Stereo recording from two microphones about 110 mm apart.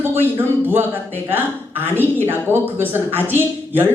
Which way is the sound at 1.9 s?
20° right (ahead or behind).